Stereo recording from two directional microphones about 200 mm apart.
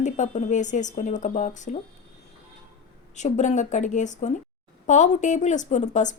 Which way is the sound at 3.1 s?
35° left (ahead or behind).